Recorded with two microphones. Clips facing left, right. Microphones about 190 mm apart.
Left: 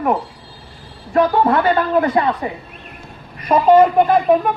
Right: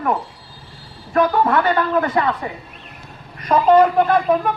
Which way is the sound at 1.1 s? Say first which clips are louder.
Left 2 dB; 25° left (ahead or behind).